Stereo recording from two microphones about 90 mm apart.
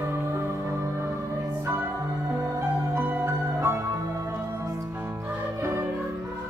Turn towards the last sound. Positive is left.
turn(degrees=-30)  # may be behind; listen again after turning